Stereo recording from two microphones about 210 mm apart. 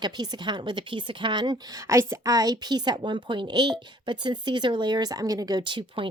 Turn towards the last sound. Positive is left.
turn(degrees=-25)  # may be behind; listen again after turning